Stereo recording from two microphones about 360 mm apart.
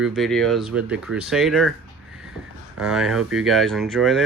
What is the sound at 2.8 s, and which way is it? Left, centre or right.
Speech, centre.